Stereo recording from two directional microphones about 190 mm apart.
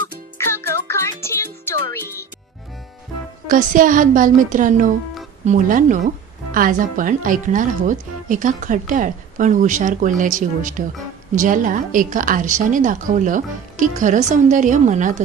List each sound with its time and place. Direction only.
0.3 s music: 15° left (ahead or behind)
3.5 s speech: 45° right (ahead or behind)